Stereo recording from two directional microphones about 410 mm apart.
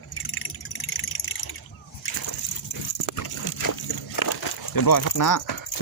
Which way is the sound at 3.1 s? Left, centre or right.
Left.